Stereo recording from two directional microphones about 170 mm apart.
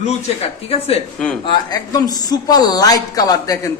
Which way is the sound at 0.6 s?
35° left (ahead or behind).